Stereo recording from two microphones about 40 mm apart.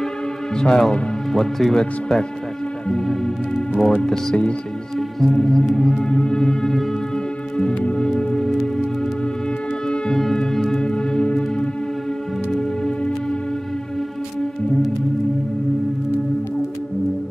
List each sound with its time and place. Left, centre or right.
0.6 s speech: centre
4.9 s music: centre
5.8 s speech: centre
6.0 s speech: left
7.9 s music: left
8.5 s music: centre
9.8 s music: centre
10.8 s music: left